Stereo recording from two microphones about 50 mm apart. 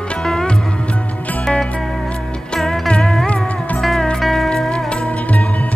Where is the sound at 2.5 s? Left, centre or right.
Centre.